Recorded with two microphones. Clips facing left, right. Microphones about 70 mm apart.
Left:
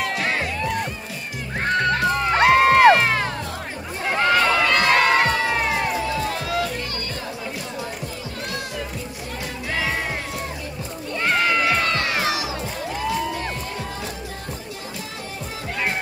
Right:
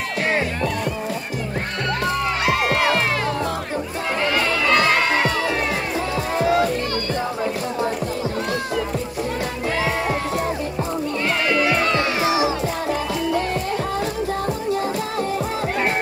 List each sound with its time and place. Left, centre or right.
2.3 s music: left
6.3 s music: right
11.2 s a sound: left
11.8 s music: right